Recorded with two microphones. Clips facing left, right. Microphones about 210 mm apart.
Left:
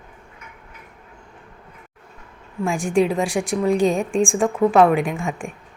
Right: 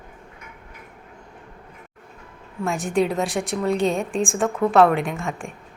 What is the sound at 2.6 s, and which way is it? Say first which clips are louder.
A woman's voice: left 3 dB; 10° left (ahead or behind).